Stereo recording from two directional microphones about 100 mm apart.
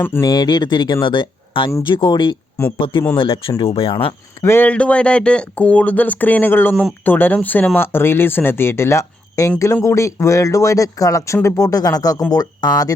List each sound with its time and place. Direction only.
0.0 s speech: 25° left (ahead or behind)
0.3 s speech: 45° left (ahead or behind); by 4.1 s 60° left (ahead or behind)
4.4 s speech: 20° left (ahead or behind); by 12.9 s 40° left (ahead or behind)